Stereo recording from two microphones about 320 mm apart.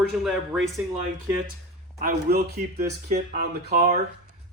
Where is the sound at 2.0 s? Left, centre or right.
Right.